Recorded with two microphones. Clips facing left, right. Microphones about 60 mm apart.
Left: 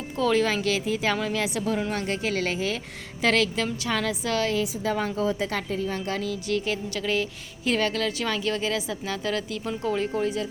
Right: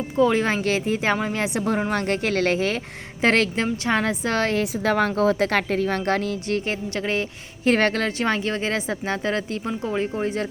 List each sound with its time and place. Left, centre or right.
0.2 s speech: right
0.4 s a woman's voice: right
10.2 s a woman's voice: right